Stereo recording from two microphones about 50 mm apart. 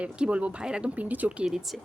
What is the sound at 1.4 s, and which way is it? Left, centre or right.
Speech, centre.